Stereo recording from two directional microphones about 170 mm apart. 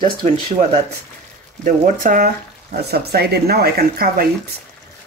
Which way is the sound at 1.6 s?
55° right (ahead or behind).